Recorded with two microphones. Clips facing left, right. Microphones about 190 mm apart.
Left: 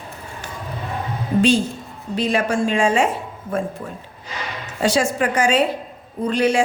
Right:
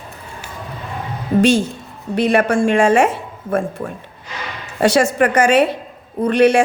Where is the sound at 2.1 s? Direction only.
60° right (ahead or behind).